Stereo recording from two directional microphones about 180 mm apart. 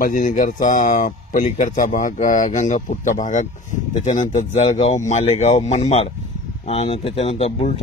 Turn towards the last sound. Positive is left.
turn(degrees=35)  # may be behind; listen again after turning